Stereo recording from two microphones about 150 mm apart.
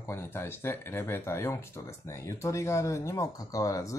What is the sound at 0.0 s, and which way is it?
Speech, 15° left (ahead or behind).